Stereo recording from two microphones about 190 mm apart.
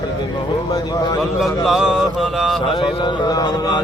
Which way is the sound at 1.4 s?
Centre (ahead or behind).